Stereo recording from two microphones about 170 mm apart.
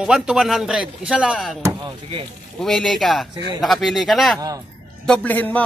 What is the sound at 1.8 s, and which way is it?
Speech, 30° right (ahead or behind).